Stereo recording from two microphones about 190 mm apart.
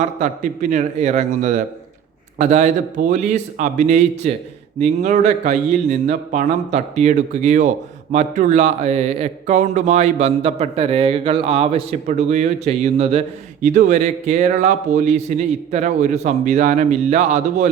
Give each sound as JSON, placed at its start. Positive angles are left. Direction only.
{"t": 0.0, "sound": "speech", "side_deg": -40}